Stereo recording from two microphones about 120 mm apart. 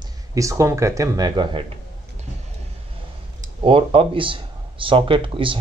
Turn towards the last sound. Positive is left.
turn(degrees=-45)  # may be behind; listen again after turning